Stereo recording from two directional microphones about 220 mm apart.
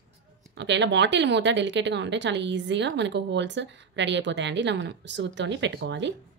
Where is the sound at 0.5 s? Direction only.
55° right (ahead or behind).